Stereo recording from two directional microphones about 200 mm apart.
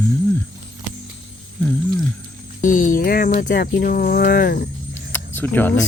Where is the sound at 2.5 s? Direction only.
40° left (ahead or behind).